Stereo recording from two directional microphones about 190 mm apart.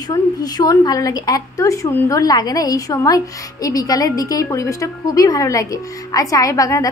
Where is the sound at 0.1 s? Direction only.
20° left (ahead or behind).